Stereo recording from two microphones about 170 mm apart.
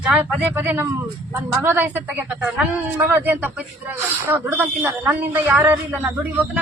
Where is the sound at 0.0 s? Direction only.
5° right (ahead or behind).